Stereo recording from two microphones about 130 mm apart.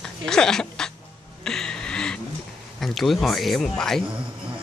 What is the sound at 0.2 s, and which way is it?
Speech, 5° left (ahead or behind).